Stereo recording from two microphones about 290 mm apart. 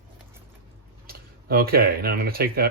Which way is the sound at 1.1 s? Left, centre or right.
Right.